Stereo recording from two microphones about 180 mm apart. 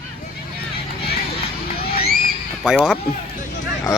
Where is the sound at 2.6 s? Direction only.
5° right (ahead or behind).